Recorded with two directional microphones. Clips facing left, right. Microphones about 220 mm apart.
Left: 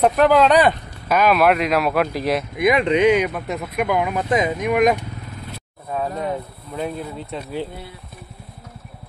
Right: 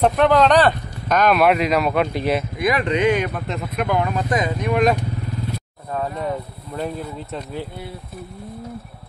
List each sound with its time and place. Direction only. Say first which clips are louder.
0.0 s speech: left 1 dB; 5° left (ahead or behind)
2.5 s speech: left 3 dB; 20° left (ahead or behind)
4.3 s speech: left 2 dB; 20° left (ahead or behind)